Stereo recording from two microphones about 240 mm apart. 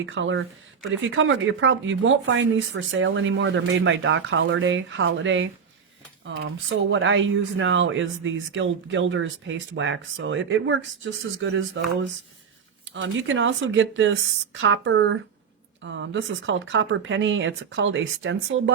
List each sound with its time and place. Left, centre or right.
0.0 s speech: right